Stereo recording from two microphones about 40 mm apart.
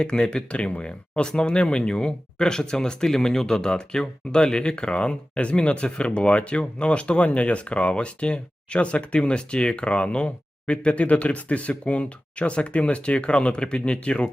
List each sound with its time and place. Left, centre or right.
0.0 s speech: centre